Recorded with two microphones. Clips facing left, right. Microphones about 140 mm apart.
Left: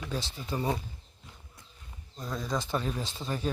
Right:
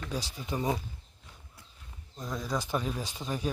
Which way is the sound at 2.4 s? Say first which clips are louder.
Even; 10° right (ahead or behind).